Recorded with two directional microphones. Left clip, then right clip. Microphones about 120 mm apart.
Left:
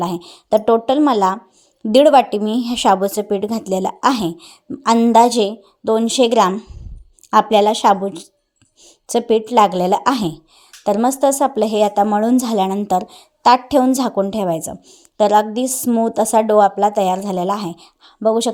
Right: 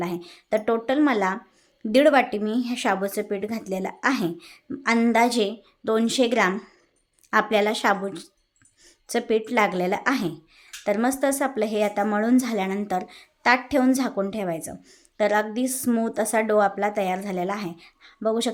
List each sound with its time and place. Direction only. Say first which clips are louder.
0.0 s a woman's voice: left 8 dB; 40° left (ahead or behind)
15.9 s a woman's voice: left 8 dB; 30° left (ahead or behind)
16.1 s a woman's voice: left 9 dB; 40° left (ahead or behind)